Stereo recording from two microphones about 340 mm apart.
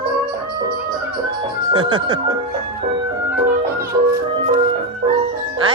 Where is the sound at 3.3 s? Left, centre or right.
Centre.